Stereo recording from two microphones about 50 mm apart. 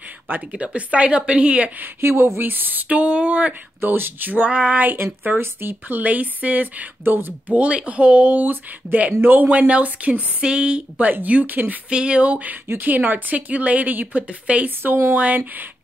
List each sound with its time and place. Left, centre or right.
0.6 s speech: right
2.0 s a woman's voice: right
3.8 s speech: right
4.3 s speech: right
4.9 s a woman's voice: right
9.5 s speech: right
10.4 s speech: centre
11.0 s a woman's voice: right
11.9 s a woman's voice: right
14.8 s speech: right
15.1 s a woman's voice: right